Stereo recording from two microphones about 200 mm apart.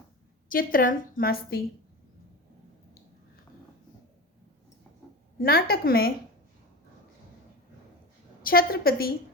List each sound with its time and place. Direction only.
0.4 s a woman's voice: 45° left (ahead or behind)
5.4 s a woman's voice: 50° left (ahead or behind)
8.4 s a woman's voice: 45° left (ahead or behind)